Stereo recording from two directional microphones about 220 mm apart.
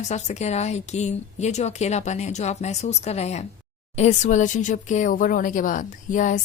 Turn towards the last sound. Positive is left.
turn(degrees=35)  # may be behind; listen again after turning